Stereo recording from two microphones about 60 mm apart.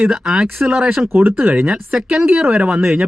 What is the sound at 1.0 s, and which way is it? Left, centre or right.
Speech, right.